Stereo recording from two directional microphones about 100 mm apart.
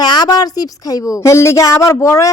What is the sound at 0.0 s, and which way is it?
A woman's voice, 45° left (ahead or behind).